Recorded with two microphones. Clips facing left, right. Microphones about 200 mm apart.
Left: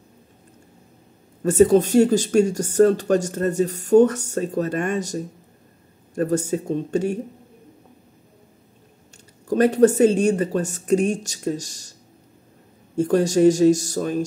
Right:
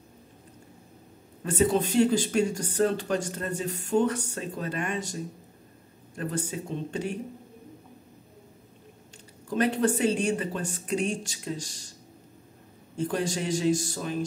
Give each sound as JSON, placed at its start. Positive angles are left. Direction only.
{"t": 1.4, "sound": "speech", "side_deg": 45}
{"t": 9.5, "sound": "speech", "side_deg": 45}
{"t": 12.9, "sound": "speech", "side_deg": 45}